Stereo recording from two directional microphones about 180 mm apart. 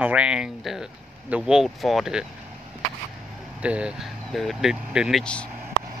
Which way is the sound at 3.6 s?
5° right (ahead or behind).